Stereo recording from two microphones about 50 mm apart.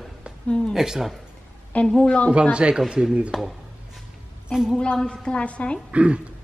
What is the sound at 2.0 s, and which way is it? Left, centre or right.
Speech, left.